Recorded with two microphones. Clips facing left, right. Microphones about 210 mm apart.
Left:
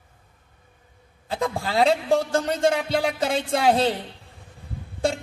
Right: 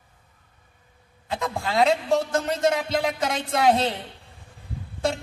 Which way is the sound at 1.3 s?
30° left (ahead or behind).